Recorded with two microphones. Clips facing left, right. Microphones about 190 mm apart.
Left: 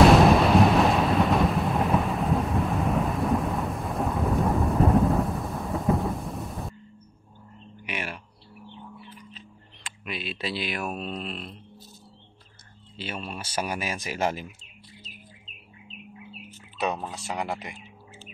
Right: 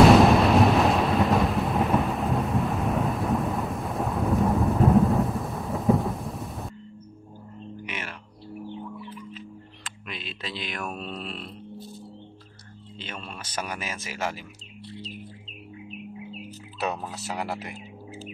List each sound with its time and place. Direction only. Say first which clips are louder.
0.0 s thunder: right 1 dB; centre (ahead or behind)
7.8 s music: left 4 dB; 15° left (ahead or behind)
9.8 s speech: left 5 dB; 10° left (ahead or behind)
12.9 s a man's voice: left 4 dB; 10° left (ahead or behind)
17.1 s speech: even; 5° right (ahead or behind)